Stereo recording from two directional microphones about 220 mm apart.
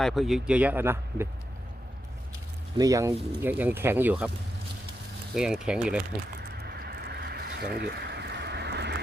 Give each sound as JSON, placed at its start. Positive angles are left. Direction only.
{"t": 0.0, "sound": "speech", "side_deg": 0}
{"t": 2.7, "sound": "speech", "side_deg": -15}
{"t": 5.3, "sound": "speech", "side_deg": -5}
{"t": 6.6, "sound": "a sound", "side_deg": -45}